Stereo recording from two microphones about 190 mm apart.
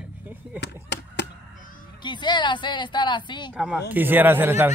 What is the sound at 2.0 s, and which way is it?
A woman's voice, 25° left (ahead or behind).